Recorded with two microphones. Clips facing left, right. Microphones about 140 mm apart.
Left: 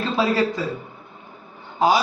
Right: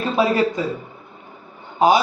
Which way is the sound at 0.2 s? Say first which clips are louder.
Right 3 dB; 20° right (ahead or behind).